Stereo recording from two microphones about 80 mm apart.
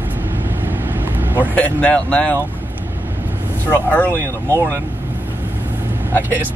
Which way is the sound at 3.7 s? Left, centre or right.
Left.